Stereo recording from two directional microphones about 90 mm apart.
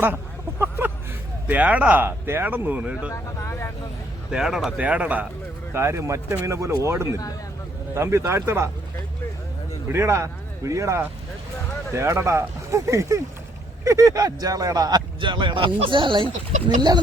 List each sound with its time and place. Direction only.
1.5 s speech: 15° right (ahead or behind)
3.1 s speech: 30° left (ahead or behind)
4.3 s speech: 5° right (ahead or behind)
5.7 s speech: 30° right (ahead or behind)
9.9 s speech: 30° right (ahead or behind); by 17.0 s 55° right (ahead or behind)